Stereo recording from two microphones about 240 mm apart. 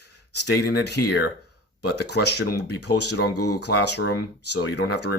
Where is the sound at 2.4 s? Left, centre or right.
Left.